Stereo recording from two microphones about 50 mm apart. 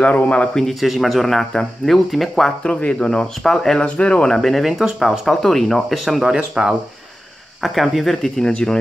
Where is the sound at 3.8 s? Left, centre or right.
Left.